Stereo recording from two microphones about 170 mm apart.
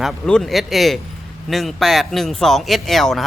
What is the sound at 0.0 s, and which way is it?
Speech, centre (ahead or behind).